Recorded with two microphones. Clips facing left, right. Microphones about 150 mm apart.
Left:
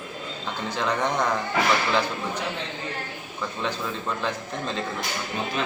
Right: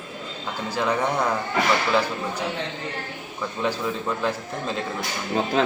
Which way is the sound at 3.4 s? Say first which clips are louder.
Right 4 dB; 5° right (ahead or behind).